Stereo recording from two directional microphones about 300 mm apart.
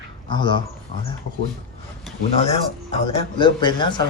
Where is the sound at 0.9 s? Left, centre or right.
Right.